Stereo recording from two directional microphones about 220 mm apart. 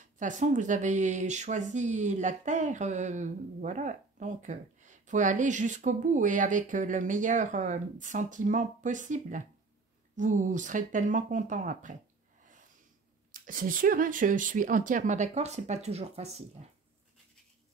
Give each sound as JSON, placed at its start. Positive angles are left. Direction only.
{"t": 0.2, "sound": "speech", "side_deg": -35}
{"t": 13.3, "sound": "speech", "side_deg": -40}